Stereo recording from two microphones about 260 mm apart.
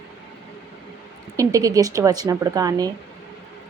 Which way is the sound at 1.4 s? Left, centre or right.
Centre.